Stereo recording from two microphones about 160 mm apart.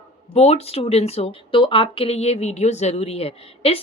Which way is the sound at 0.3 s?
40° left (ahead or behind).